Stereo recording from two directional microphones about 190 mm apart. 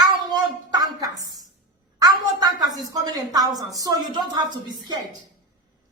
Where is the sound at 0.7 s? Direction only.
20° right (ahead or behind).